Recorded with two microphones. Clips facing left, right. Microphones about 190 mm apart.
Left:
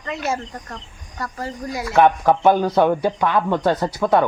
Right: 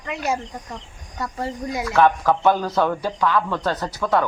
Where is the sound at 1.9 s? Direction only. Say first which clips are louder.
Left 3 dB; 20° left (ahead or behind).